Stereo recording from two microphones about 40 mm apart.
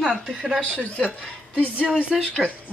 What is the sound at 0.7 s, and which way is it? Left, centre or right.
Speech, left.